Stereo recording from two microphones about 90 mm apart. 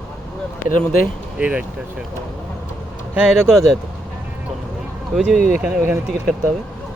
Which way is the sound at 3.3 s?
Centre (ahead or behind).